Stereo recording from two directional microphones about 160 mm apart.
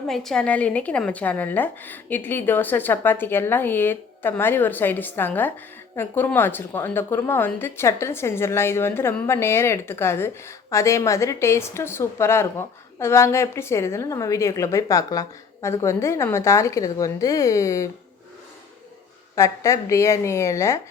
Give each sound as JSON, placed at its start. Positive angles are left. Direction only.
{"t": 0.1, "sound": "a woman's voice", "side_deg": 0}
{"t": 19.4, "sound": "a woman's voice", "side_deg": 20}